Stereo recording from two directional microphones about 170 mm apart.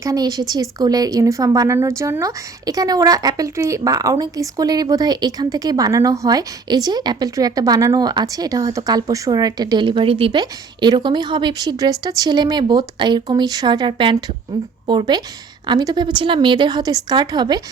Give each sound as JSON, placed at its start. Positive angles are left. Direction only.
{"t": 0.0, "sound": "speech", "side_deg": -20}